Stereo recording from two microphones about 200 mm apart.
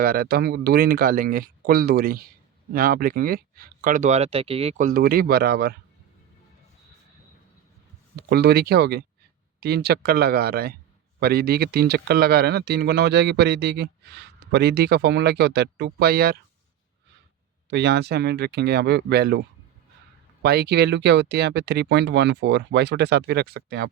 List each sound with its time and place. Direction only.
0.0 s speech: 45° right (ahead or behind)
8.1 s speech: 55° right (ahead or behind)
17.7 s speech: 60° right (ahead or behind)